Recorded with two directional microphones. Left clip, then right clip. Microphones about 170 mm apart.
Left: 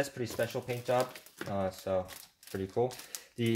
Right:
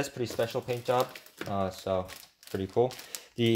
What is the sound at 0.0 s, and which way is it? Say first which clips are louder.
Speech: right 2 dB; 25° right (ahead or behind).